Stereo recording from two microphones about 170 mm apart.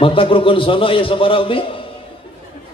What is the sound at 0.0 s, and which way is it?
A man's voice, 30° left (ahead or behind).